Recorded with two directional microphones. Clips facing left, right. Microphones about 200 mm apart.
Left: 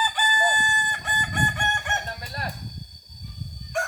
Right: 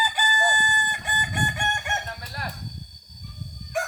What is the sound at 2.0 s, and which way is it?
Chicken, 30° left (ahead or behind).